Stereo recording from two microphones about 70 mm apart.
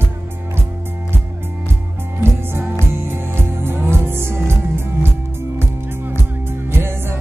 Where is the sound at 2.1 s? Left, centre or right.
Right.